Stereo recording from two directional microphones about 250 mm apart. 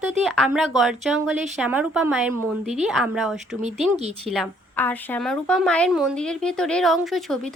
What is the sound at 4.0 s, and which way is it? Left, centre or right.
Speech, right.